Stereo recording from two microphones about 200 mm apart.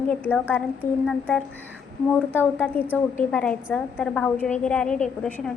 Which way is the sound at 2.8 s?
5° left (ahead or behind).